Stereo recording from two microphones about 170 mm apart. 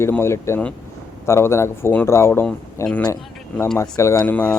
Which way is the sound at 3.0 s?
20° left (ahead or behind).